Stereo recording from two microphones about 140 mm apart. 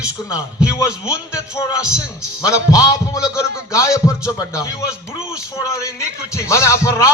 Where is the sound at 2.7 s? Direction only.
25° left (ahead or behind).